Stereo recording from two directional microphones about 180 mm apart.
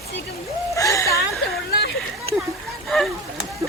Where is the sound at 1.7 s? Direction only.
65° left (ahead or behind).